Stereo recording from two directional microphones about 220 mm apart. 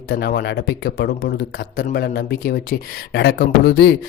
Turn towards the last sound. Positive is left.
turn(degrees=45)  # may be behind; listen again after turning